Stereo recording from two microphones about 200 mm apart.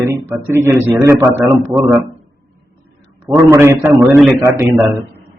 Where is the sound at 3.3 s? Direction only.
10° right (ahead or behind).